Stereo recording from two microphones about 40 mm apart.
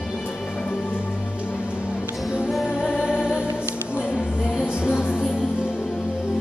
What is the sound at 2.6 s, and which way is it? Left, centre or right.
Music, centre.